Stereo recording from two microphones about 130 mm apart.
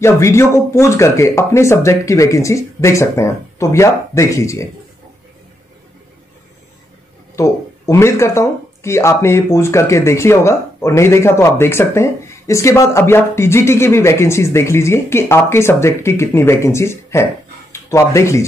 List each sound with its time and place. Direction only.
0.0 s speech: 20° left (ahead or behind)
7.3 s speech: 25° left (ahead or behind)